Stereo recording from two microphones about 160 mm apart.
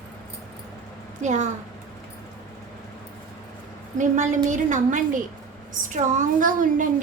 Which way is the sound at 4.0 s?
50° right (ahead or behind).